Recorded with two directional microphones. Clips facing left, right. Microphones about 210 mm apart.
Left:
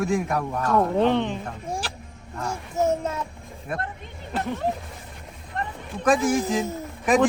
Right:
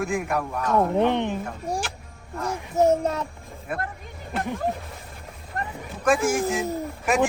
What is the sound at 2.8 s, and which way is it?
Speech, 15° right (ahead or behind).